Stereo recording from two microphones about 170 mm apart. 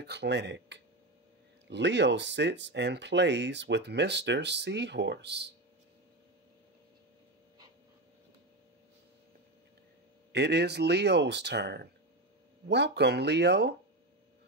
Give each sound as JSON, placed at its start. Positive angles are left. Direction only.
{"t": 0.0, "sound": "speech", "side_deg": -85}
{"t": 10.3, "sound": "speech", "side_deg": -75}